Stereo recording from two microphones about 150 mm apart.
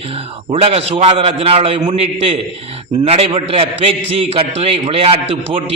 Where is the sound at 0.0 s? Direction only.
40° right (ahead or behind).